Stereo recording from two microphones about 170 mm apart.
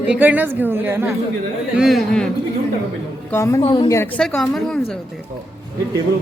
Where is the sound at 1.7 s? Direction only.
Centre (ahead or behind).